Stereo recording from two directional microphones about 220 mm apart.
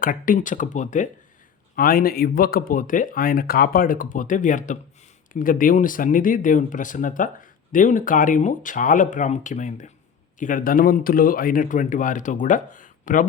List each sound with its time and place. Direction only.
0.0 s speech: 40° left (ahead or behind)